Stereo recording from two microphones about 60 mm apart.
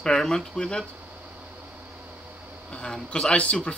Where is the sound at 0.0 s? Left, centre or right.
Centre.